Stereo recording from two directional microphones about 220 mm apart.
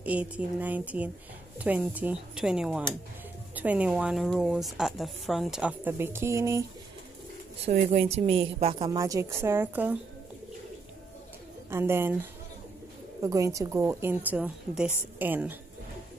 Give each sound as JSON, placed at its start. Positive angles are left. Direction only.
{"t": 0.0, "sound": "a woman's voice", "side_deg": -5}
{"t": 7.6, "sound": "a woman's voice", "side_deg": -25}
{"t": 11.7, "sound": "a woman's voice", "side_deg": -10}